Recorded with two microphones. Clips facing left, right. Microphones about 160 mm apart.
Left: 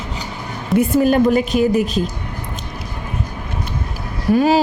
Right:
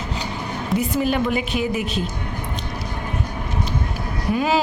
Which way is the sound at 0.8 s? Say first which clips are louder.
Left 8 dB; 45° left (ahead or behind).